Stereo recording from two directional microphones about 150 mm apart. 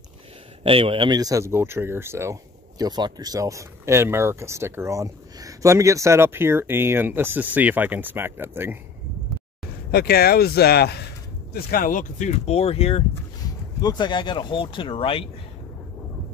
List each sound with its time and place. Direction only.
0.7 s speech: 40° right (ahead or behind); by 8.7 s 15° right (ahead or behind)
9.8 s speech: 90° left
11.5 s speech: 70° left (ahead or behind); by 13.0 s 40° left (ahead or behind)
13.7 s speech: 25° left (ahead or behind)